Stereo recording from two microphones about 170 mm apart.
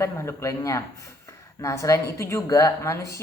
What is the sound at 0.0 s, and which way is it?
Speech, 15° left (ahead or behind).